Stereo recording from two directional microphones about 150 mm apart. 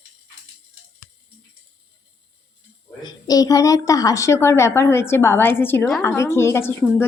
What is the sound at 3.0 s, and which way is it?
A woman's voice, 25° left (ahead or behind).